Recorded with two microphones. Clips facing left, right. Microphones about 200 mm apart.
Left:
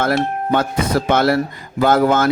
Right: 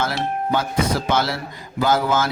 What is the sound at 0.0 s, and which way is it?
A man's voice, 55° left (ahead or behind).